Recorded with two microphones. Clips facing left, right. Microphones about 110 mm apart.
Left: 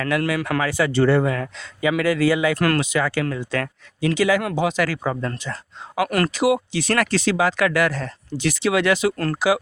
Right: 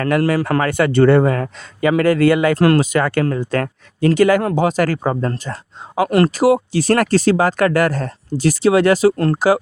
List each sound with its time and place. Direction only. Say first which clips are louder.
0.0 s speech: right 6 dB; 45° right (ahead or behind)
2.6 s speech: right 7 dB; 30° right (ahead or behind)
2.8 s speech: right 5 dB; 50° right (ahead or behind)
6.0 s speech: right 6 dB; 30° right (ahead or behind)
6.3 s speech: right 5 dB; 40° right (ahead or behind)
9.1 s speech: right 7 dB; 25° right (ahead or behind)